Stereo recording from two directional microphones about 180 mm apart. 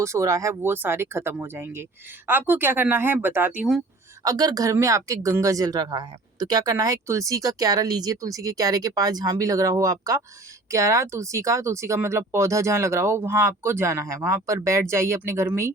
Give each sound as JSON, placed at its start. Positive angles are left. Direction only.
{"t": 0.0, "sound": "speech", "side_deg": -15}
{"t": 4.2, "sound": "speech", "side_deg": -20}